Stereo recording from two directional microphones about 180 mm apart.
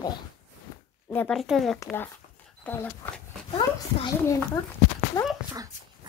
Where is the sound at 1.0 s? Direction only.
5° left (ahead or behind).